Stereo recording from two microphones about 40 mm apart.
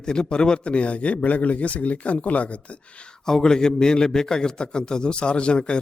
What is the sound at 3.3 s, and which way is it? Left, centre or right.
A man's voice, centre.